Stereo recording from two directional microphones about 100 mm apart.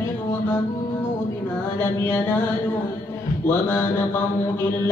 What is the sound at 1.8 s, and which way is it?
Music, 25° left (ahead or behind).